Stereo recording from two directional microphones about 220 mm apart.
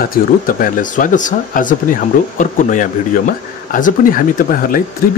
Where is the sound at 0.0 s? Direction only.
40° left (ahead or behind).